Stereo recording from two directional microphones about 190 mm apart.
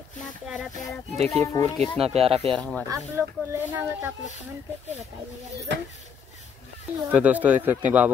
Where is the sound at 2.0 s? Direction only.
30° right (ahead or behind).